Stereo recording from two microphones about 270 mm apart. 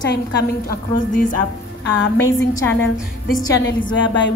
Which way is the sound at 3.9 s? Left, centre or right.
Left.